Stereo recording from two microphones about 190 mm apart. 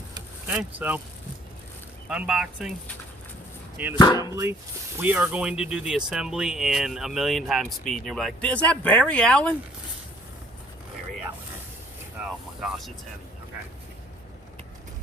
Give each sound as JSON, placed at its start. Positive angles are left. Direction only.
{"t": 0.4, "sound": "speech", "side_deg": -5}
{"t": 2.0, "sound": "speech", "side_deg": -5}
{"t": 3.9, "sound": "speech", "side_deg": 20}
{"t": 4.2, "sound": "speech", "side_deg": -15}
{"t": 12.5, "sound": "speech", "side_deg": 0}